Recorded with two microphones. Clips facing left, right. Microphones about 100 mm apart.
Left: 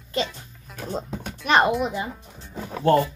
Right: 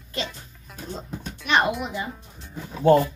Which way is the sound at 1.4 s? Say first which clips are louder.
Left 3 dB; 35° left (ahead or behind).